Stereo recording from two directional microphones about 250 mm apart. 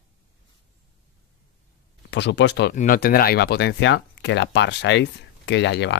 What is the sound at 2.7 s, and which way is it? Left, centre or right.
Speech, left.